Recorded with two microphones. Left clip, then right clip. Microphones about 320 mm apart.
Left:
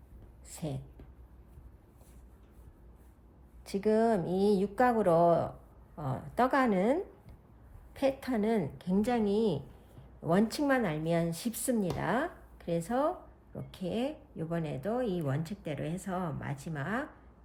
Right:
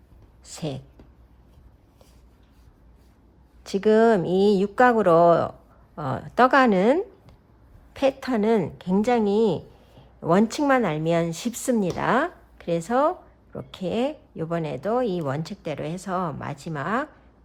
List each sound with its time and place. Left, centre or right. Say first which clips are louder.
0.4 s speech: right 8 dB; centre
3.6 s speech: right 10 dB; right